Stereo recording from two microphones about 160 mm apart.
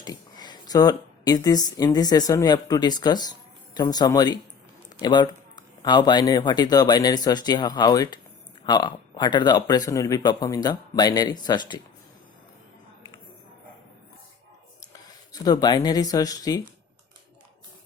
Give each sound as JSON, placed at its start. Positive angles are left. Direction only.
{"t": 0.0, "sound": "speech", "side_deg": 25}
{"t": 15.3, "sound": "speech", "side_deg": 25}